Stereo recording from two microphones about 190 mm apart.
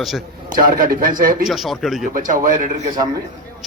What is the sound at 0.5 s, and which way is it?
Speech, 50° right (ahead or behind).